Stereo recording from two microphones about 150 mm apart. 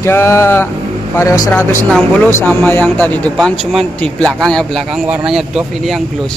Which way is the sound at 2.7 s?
10° left (ahead or behind).